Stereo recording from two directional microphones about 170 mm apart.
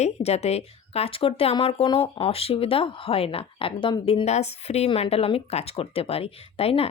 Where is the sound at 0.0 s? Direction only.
40° left (ahead or behind).